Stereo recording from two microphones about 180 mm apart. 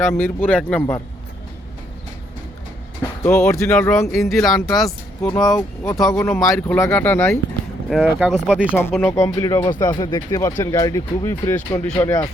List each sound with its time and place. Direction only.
0.0 s speech: 10° left (ahead or behind)
3.2 s speech: 15° left (ahead or behind)
4.3 s speech: centre (ahead or behind)
5.5 s speech: 15° left (ahead or behind)
7.9 s speech: centre (ahead or behind)
8.7 s speech: 10° left (ahead or behind)